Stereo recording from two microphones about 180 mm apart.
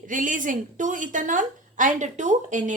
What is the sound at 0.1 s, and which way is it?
A woman's voice, 45° right (ahead or behind).